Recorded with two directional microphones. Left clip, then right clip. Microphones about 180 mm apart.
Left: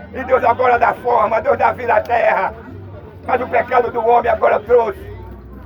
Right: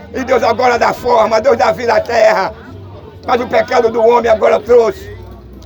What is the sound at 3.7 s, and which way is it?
Speech, 55° right (ahead or behind).